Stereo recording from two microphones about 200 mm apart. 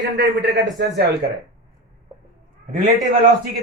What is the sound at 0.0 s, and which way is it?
A man's voice, 55° right (ahead or behind).